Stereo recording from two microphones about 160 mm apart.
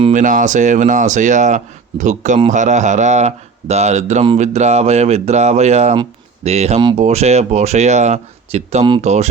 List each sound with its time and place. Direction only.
0.1 s speech: 50° right (ahead or behind)